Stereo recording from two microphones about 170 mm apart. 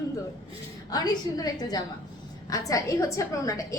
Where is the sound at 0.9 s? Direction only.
20° left (ahead or behind).